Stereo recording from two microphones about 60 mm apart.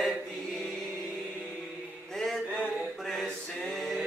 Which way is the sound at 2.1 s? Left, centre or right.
Centre.